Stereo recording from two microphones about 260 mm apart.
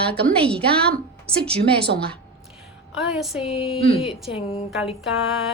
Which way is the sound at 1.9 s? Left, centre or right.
Right.